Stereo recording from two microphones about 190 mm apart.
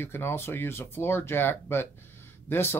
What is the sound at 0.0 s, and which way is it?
Speech, 10° left (ahead or behind).